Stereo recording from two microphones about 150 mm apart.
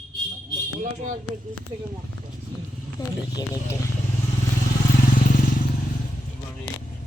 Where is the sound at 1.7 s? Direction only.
35° right (ahead or behind).